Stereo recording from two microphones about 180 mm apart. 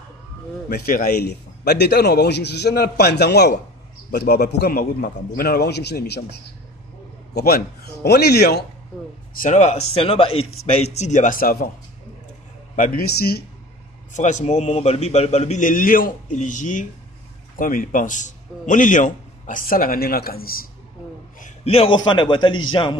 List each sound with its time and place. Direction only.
0.7 s a man's voice: 55° left (ahead or behind)
7.3 s a man's voice: 60° left (ahead or behind)
9.4 s a man's voice: 40° left (ahead or behind)
12.7 s a man's voice: 50° left (ahead or behind)
14.1 s a man's voice: 40° left (ahead or behind)
21.4 s a man's voice: 35° left (ahead or behind)